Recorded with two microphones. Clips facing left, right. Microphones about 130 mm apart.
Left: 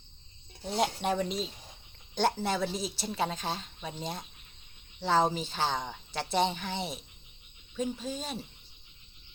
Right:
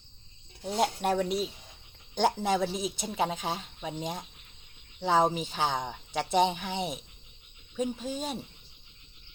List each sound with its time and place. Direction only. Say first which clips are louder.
0.7 s speech: right 2 dB; 5° right (ahead or behind)
2.4 s speech: right 3 dB; 15° right (ahead or behind)